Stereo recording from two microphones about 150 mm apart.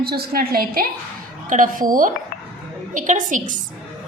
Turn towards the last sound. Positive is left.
turn(degrees=-60)  # may be behind; listen again after turning